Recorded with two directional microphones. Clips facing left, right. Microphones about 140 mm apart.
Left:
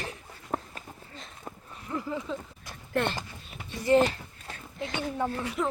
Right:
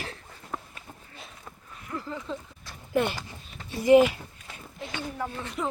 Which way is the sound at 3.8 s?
15° right (ahead or behind).